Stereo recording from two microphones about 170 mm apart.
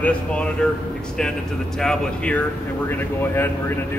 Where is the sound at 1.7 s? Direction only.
5° left (ahead or behind).